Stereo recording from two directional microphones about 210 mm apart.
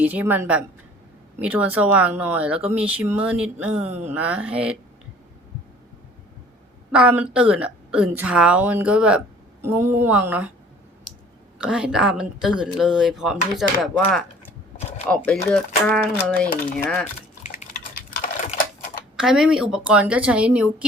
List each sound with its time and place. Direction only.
0.0 s a woman's voice: 5° right (ahead or behind)
6.9 s a woman's voice: 5° right (ahead or behind)
11.6 s speech: 5° right (ahead or behind)
14.8 s shuffling cards: 30° left (ahead or behind)
15.1 s speech: 5° left (ahead or behind)
17.4 s a sound: 35° left (ahead or behind)
19.1 s speech: 5° right (ahead or behind)